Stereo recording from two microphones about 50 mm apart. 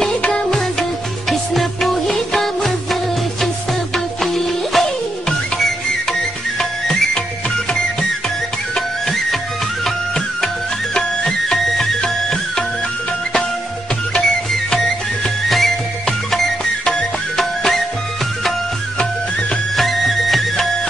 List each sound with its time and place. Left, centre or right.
0.2 s music: centre
1.3 s music: centre
6.6 s music: centre
8.7 s music: centre
14.2 s music: centre
19.7 s music: centre